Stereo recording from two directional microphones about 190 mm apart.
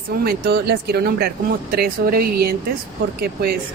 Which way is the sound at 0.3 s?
55° right (ahead or behind).